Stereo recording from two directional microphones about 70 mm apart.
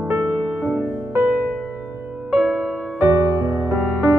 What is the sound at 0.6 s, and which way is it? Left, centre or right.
Music, right.